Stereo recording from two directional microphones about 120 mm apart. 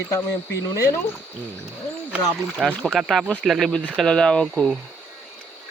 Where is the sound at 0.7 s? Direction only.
30° left (ahead or behind).